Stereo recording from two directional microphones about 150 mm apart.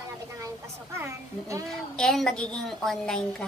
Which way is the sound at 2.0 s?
5° left (ahead or behind).